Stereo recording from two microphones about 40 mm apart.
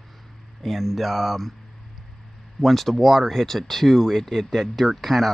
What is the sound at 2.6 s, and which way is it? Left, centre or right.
Speech, centre.